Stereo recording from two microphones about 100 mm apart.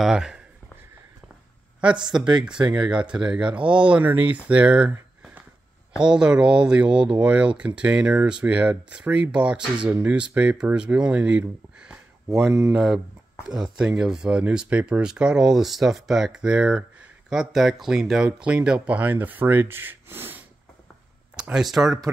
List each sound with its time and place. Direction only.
0.0 s speech: 5° right (ahead or behind)
2.4 s speech: 10° right (ahead or behind)
12.4 s speech: 30° right (ahead or behind)
12.7 s speech: 5° right (ahead or behind); by 20.4 s 20° right (ahead or behind)
21.4 s speech: 5° right (ahead or behind)